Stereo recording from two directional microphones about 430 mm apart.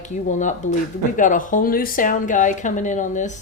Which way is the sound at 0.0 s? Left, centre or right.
Centre.